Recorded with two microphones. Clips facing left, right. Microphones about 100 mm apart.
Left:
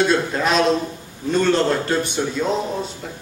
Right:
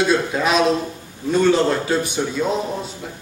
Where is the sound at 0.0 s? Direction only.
5° right (ahead or behind).